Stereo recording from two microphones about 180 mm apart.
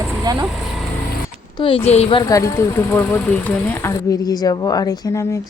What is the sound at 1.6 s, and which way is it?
Speech, 30° left (ahead or behind).